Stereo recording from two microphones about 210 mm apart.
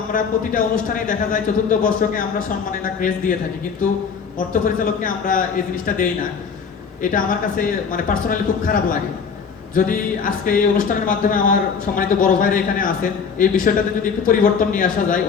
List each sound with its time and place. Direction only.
0.1 s a man's voice: 40° left (ahead or behind)
4.4 s a man's voice: 40° left (ahead or behind)
10.2 s a man's voice: 40° left (ahead or behind)